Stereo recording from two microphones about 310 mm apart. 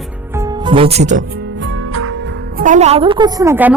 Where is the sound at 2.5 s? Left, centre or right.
Right; by 3.7 s centre.